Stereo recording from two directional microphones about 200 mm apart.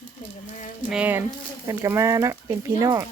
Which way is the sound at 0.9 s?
10° right (ahead or behind).